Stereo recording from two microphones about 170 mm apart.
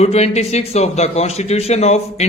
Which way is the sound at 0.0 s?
40° left (ahead or behind).